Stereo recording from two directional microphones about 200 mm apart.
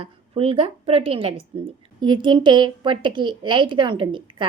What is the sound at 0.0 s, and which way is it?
A woman's voice, 30° right (ahead or behind).